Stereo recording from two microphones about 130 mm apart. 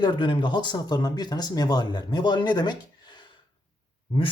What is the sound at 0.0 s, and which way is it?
Speech, 35° left (ahead or behind).